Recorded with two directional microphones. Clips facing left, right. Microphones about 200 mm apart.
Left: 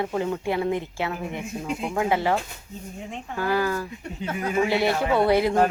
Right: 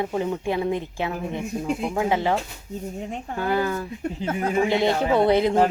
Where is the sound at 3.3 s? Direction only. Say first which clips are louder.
Even; 20° right (ahead or behind).